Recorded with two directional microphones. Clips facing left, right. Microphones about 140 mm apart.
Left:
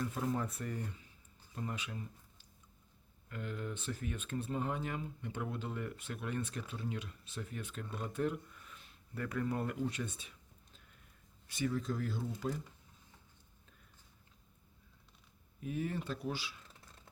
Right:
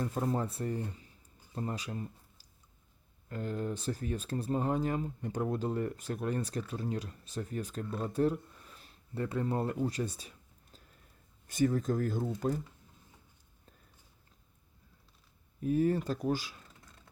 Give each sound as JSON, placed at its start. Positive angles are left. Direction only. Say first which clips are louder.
{"t": 0.0, "sound": "speech", "louder": "right 4 dB", "side_deg": -35}
{"t": 15.6, "sound": "speech", "louder": "right 10 dB", "side_deg": -40}